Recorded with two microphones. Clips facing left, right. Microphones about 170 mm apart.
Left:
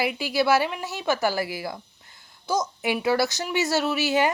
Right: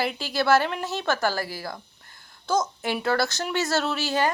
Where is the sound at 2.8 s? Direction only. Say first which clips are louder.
Left 2 dB; 10° left (ahead or behind).